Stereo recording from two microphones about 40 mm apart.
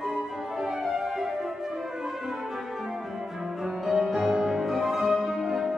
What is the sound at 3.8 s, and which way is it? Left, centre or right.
Music, centre.